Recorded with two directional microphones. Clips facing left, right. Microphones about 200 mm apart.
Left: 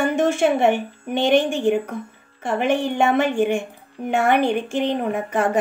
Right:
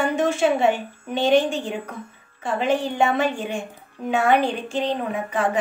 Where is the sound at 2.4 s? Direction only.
55° left (ahead or behind).